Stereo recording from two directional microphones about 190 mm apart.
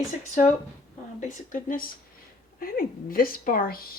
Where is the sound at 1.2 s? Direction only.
45° left (ahead or behind).